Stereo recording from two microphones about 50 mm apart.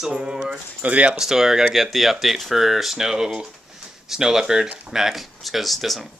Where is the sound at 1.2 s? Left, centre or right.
Centre.